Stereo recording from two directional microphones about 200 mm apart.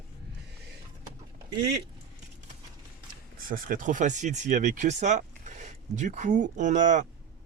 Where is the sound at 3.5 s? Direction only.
40° right (ahead or behind).